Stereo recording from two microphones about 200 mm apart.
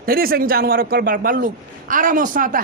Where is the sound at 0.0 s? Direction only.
45° right (ahead or behind).